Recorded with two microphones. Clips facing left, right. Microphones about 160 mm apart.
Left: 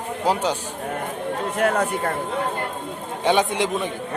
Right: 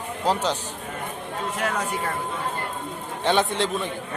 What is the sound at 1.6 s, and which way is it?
Speech, 55° left (ahead or behind).